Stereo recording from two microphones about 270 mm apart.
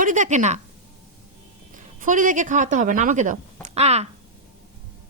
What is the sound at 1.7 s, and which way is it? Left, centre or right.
Speech, right.